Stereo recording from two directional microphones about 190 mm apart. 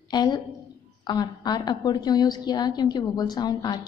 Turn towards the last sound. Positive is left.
turn(degrees=20)  # may be behind; listen again after turning